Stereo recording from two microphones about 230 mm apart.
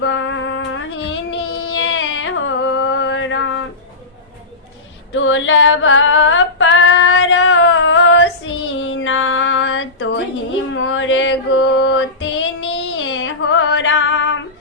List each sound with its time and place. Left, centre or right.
0.0 s music: left
5.1 s female singing: left